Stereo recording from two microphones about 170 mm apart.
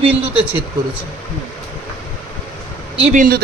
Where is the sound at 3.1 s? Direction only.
60° right (ahead or behind).